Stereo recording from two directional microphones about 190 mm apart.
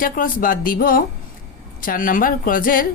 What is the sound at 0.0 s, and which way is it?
A woman's voice, 45° left (ahead or behind).